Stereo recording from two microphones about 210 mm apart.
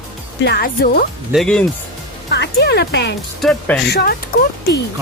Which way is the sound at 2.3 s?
55° left (ahead or behind).